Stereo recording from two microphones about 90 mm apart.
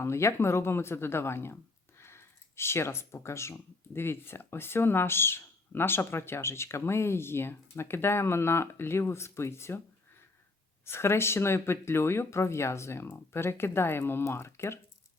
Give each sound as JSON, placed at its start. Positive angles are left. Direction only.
{"t": 0.0, "sound": "speech", "side_deg": 30}
{"t": 2.0, "sound": "a sound", "side_deg": 30}
{"t": 3.9, "sound": "speech", "side_deg": 25}
{"t": 10.8, "sound": "speech", "side_deg": 30}